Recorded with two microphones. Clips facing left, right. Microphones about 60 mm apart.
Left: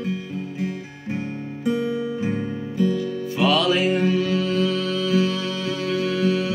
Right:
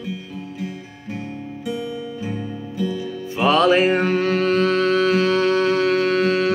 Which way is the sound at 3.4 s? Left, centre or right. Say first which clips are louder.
Right 4 dB; right.